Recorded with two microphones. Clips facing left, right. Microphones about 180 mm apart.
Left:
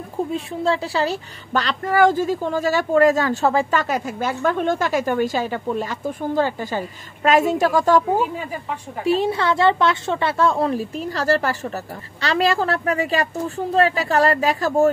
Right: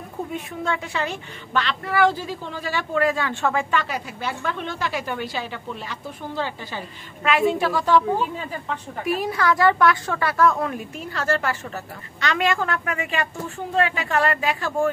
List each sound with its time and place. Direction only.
0.3 s a woman's voice: 30° left (ahead or behind)
8.4 s a woman's voice: 10° left (ahead or behind)
9.0 s a woman's voice: 25° left (ahead or behind)